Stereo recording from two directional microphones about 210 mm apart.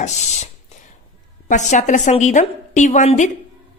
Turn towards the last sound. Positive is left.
turn(degrees=35)  # may be behind; listen again after turning